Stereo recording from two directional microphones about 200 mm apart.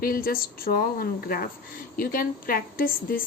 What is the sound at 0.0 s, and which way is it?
A woman's voice, 45° left (ahead or behind).